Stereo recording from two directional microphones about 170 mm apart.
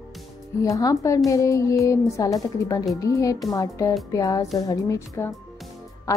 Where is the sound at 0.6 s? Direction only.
20° left (ahead or behind).